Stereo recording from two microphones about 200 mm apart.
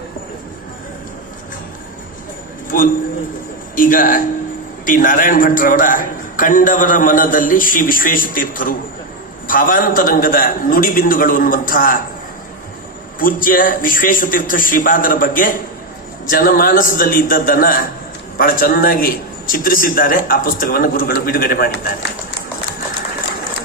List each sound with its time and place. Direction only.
2.6 s a man's voice: 45° left (ahead or behind)
13.1 s a man's voice: 45° left (ahead or behind)